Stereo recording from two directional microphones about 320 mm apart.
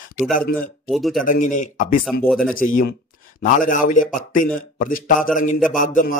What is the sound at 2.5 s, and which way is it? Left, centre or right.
A man's voice, left.